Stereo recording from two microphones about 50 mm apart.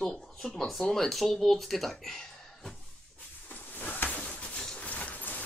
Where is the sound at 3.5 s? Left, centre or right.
Left.